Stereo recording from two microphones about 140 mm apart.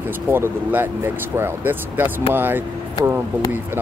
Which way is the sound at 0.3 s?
15° right (ahead or behind).